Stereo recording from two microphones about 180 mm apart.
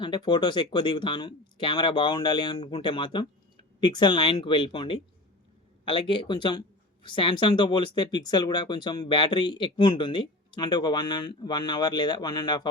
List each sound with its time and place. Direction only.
0.0 s speech: 25° left (ahead or behind)